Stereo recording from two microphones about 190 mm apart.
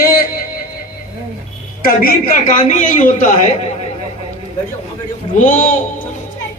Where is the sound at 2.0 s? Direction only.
45° left (ahead or behind).